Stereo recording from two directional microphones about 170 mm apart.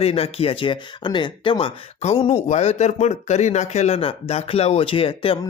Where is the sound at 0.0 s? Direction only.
35° left (ahead or behind).